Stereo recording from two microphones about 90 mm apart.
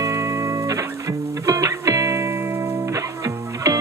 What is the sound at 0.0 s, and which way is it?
Music, 35° right (ahead or behind).